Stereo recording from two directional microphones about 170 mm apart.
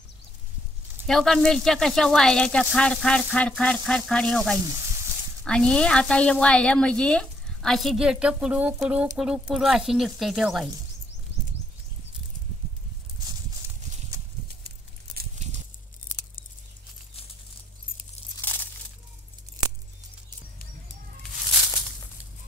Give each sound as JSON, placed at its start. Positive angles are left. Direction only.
{"t": 1.0, "sound": "a woman's voice", "side_deg": 0}
{"t": 15.3, "sound": "a sound", "side_deg": -45}
{"t": 18.4, "sound": "crushing", "side_deg": 10}